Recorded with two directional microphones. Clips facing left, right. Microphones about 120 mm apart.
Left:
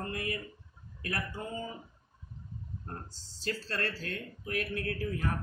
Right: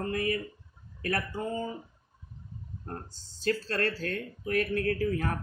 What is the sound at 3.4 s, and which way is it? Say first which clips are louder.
A man's voice: right 6 dB; 45° right (ahead or behind).